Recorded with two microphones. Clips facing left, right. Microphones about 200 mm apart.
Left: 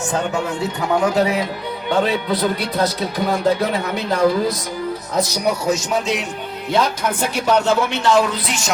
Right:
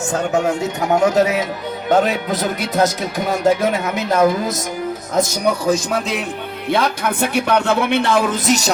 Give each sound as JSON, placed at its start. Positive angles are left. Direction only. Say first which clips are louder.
{"t": 0.1, "sound": "speech", "louder": "right 5 dB", "side_deg": -40}